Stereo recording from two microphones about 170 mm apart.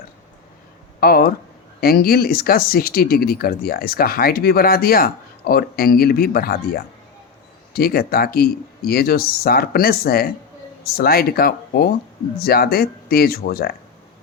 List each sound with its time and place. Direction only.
0.9 s speech: 60° left (ahead or behind)